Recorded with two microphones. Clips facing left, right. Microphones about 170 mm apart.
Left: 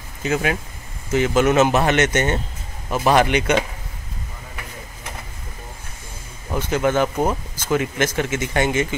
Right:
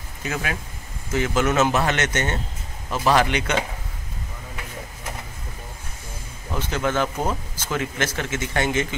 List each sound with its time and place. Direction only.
0.2 s speech: 25° left (ahead or behind)
6.7 s speech: 15° left (ahead or behind)